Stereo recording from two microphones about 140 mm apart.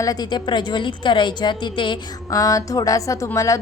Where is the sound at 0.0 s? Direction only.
25° left (ahead or behind).